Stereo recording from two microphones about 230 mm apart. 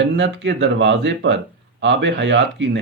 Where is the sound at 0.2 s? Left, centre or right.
Right.